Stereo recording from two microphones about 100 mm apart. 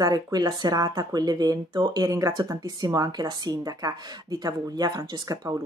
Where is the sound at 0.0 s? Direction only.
40° right (ahead or behind).